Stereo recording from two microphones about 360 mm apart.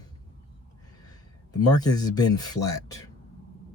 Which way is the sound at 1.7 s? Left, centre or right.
Centre.